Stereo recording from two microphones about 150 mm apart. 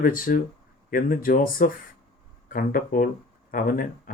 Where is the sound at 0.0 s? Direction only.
65° left (ahead or behind).